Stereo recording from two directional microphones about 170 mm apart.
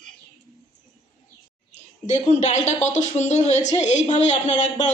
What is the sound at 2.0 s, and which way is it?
A woman's voice, 45° left (ahead or behind).